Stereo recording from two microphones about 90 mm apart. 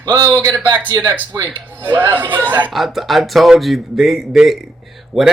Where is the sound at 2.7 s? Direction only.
Centre (ahead or behind).